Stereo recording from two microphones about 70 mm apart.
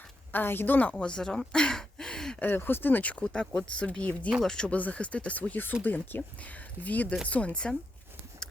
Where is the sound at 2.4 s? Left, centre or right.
Left; by 4.7 s centre.